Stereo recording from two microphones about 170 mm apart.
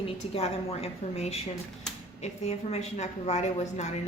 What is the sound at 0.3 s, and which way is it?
A woman's voice, 35° left (ahead or behind).